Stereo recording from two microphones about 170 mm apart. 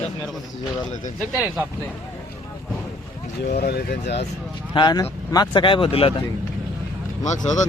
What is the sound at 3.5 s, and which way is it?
Speech, 70° left (ahead or behind).